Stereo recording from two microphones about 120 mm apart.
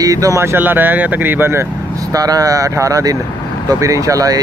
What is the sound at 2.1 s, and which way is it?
Speech, 30° right (ahead or behind).